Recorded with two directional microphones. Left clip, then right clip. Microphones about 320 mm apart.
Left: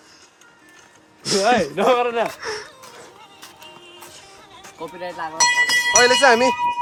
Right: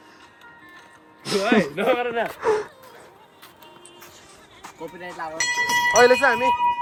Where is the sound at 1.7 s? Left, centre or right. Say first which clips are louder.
Left 4 dB; centre.